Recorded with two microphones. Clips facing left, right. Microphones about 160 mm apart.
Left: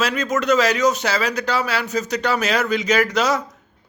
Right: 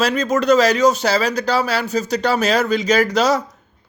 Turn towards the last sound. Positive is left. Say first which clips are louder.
# right 3 dB
turn(degrees=-35)  # may be behind; listen again after turning